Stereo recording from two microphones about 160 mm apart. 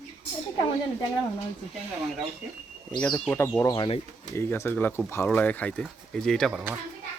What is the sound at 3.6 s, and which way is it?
Speech, 20° left (ahead or behind).